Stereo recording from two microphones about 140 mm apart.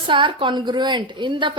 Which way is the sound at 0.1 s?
35° right (ahead or behind).